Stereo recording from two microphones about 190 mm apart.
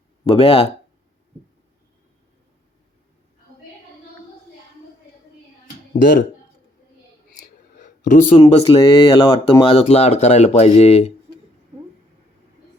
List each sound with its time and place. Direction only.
0.3 s speech: 30° left (ahead or behind)
7.4 s a sound: 40° left (ahead or behind)
8.4 s speech: 30° left (ahead or behind)